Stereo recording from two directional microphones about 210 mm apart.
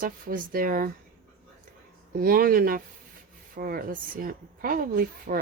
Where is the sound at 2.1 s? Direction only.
45° right (ahead or behind).